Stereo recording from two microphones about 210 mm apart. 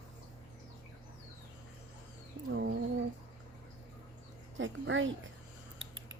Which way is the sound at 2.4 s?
55° right (ahead or behind).